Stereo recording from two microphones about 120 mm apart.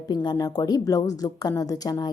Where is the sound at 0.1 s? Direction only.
35° left (ahead or behind).